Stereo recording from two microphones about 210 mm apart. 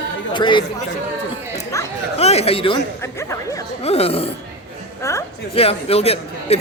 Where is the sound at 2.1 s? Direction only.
30° left (ahead or behind).